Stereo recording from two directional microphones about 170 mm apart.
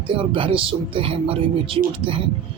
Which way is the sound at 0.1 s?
30° right (ahead or behind).